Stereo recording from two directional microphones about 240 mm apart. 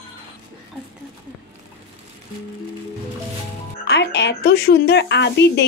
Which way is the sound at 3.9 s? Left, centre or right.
Left.